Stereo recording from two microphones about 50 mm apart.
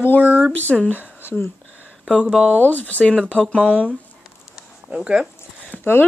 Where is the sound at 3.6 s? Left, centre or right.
Right.